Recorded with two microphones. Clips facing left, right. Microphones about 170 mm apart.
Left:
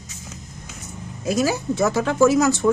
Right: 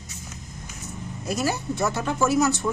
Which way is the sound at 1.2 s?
90° left.